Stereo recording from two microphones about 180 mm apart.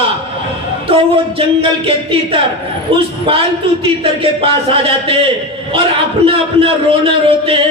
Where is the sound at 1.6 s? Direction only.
30° right (ahead or behind).